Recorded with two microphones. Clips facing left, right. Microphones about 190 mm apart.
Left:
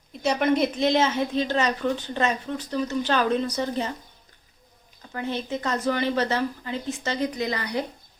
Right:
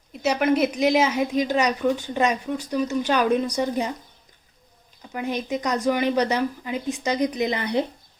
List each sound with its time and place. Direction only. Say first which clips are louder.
0.1 s a woman's voice: right 1 dB; 5° right (ahead or behind)
5.1 s a woman's voice: right 2 dB; 15° right (ahead or behind)